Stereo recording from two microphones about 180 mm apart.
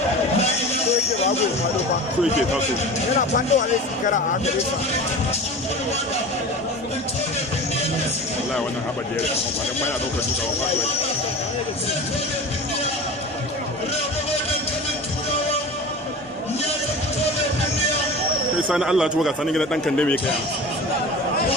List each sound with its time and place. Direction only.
3.2 s speech: 45° left (ahead or behind)
18.7 s a man's voice: 5° right (ahead or behind)